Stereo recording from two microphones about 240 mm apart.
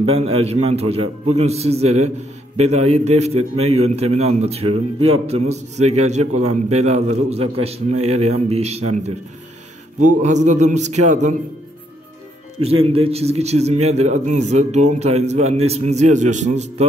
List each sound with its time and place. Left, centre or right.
0.1 s a man's voice: right
12.5 s a man's voice: right